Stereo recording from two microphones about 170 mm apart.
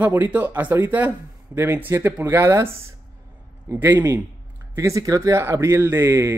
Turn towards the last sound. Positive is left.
turn(degrees=-15)  # may be behind; listen again after turning